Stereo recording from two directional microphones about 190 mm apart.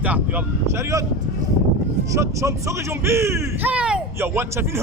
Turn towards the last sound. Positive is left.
turn(degrees=-15)  # may be behind; listen again after turning